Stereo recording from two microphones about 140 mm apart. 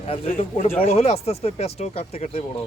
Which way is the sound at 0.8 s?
45° left (ahead or behind).